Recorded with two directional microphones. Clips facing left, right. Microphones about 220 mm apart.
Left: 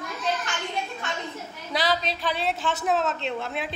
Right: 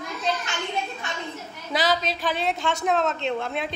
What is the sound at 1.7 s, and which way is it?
A woman's voice, centre (ahead or behind).